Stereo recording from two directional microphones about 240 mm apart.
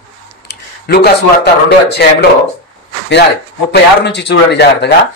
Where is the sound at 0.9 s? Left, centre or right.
Left.